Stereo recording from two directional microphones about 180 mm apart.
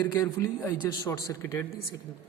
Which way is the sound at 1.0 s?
15° left (ahead or behind).